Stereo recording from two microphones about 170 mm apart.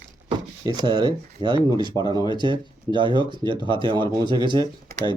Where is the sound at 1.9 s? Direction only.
25° left (ahead or behind).